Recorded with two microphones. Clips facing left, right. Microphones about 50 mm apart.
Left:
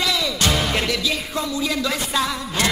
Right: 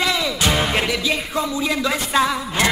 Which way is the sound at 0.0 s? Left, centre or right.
Right.